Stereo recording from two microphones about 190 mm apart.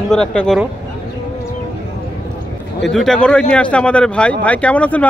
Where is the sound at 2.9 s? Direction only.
5° left (ahead or behind).